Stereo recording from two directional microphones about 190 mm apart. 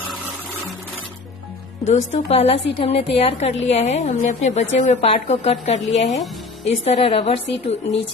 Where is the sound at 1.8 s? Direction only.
35° left (ahead or behind).